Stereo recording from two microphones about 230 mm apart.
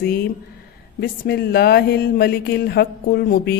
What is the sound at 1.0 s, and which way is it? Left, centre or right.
Speech, left.